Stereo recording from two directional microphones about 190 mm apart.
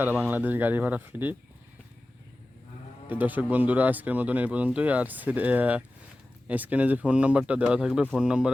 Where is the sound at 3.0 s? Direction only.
10° right (ahead or behind).